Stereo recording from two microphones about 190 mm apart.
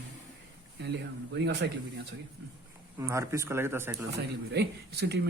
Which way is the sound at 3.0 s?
15° right (ahead or behind).